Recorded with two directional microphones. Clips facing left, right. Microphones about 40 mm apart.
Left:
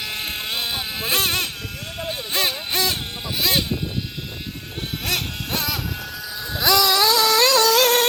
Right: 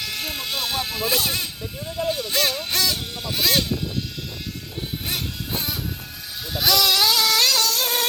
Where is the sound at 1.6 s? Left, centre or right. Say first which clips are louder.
Even; left.